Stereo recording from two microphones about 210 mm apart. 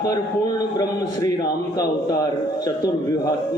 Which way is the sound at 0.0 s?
15° left (ahead or behind).